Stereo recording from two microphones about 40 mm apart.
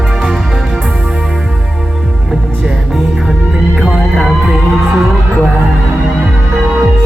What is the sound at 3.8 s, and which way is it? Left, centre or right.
Music, centre.